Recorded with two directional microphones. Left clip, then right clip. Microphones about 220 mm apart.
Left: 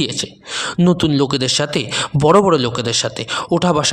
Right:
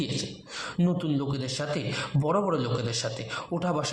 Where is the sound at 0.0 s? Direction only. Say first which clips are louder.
Left 11 dB; 40° left (ahead or behind).